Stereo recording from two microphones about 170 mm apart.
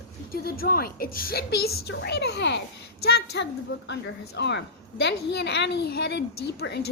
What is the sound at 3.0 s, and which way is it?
A woman's voice, 75° left (ahead or behind).